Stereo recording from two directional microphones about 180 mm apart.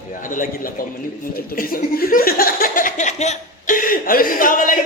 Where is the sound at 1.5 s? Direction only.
55° left (ahead or behind).